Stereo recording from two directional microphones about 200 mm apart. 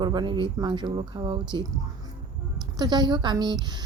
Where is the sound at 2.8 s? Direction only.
20° right (ahead or behind).